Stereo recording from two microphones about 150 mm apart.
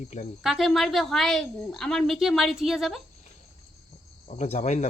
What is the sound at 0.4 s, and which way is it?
A woman's voice, centre (ahead or behind).